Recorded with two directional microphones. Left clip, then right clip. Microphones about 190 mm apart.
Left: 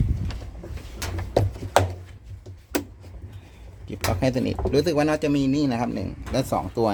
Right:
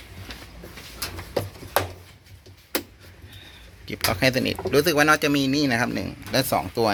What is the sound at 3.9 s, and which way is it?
Speech, centre (ahead or behind).